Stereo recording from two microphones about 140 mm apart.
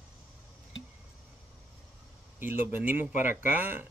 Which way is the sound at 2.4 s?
15° right (ahead or behind).